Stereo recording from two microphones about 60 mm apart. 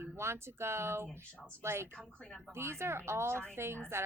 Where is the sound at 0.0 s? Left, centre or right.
Right.